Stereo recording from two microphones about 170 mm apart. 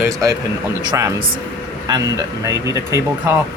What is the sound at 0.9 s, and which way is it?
Speech, 20° right (ahead or behind).